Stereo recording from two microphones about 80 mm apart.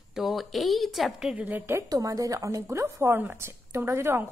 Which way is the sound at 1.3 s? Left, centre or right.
Centre.